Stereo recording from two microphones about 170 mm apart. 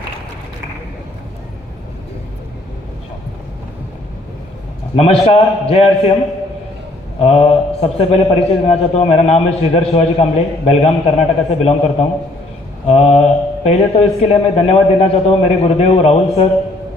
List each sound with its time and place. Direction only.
4.9 s a man's voice: 35° left (ahead or behind)
7.2 s a man's voice: 35° left (ahead or behind)
12.9 s a man's voice: 40° left (ahead or behind)